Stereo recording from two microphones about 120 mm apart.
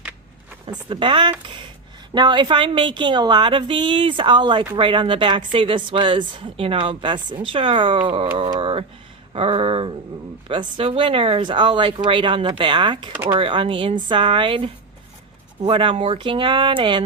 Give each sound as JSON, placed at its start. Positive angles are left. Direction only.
{"t": 0.7, "sound": "a woman's voice", "side_deg": -40}
{"t": 8.4, "sound": "speech", "side_deg": -35}
{"t": 9.3, "sound": "a woman's voice", "side_deg": -55}